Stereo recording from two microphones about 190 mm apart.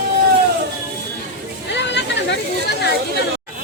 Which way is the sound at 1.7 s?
65° left (ahead or behind).